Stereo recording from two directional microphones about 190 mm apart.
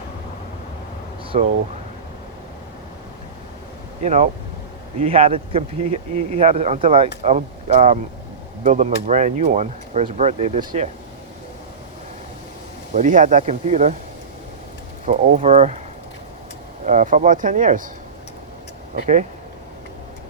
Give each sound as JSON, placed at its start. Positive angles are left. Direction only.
{"t": 1.3, "sound": "speech", "side_deg": -40}
{"t": 4.0, "sound": "speech", "side_deg": -40}
{"t": 12.9, "sound": "speech", "side_deg": -45}
{"t": 15.0, "sound": "speech", "side_deg": -40}
{"t": 16.8, "sound": "speech", "side_deg": -40}